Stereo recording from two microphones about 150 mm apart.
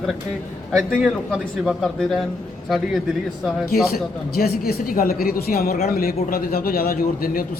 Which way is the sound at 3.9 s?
90° left.